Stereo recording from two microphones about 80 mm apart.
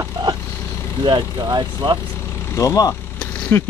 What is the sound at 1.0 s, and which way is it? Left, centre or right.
Speech, right.